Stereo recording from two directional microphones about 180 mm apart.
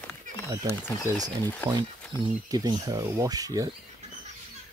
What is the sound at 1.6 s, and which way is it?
Speech, 10° left (ahead or behind).